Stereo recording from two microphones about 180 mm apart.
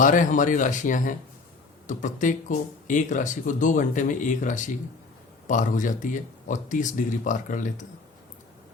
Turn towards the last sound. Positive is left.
turn(degrees=45)  # may be behind; listen again after turning